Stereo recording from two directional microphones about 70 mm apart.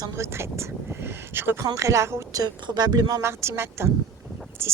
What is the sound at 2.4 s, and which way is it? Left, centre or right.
Speech, right.